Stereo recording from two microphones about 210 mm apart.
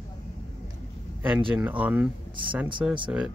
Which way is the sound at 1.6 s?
5° right (ahead or behind).